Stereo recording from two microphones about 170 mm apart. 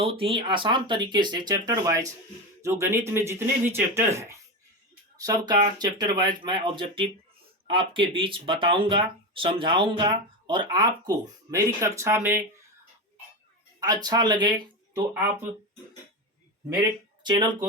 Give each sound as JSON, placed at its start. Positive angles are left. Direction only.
{"t": 0.0, "sound": "speech", "side_deg": -35}
{"t": 13.7, "sound": "speech", "side_deg": -20}
{"t": 15.1, "sound": "speech", "side_deg": -10}
{"t": 17.2, "sound": "speech", "side_deg": -25}